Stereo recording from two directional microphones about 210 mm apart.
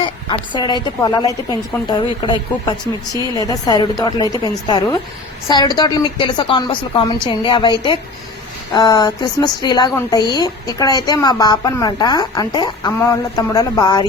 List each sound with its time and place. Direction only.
0.0 s a woman's voice: 20° left (ahead or behind)